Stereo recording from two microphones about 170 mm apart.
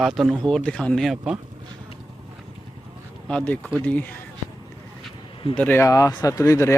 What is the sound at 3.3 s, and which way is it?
Speech, 10° left (ahead or behind).